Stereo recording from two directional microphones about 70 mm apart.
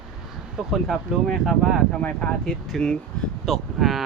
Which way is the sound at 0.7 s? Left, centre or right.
Centre.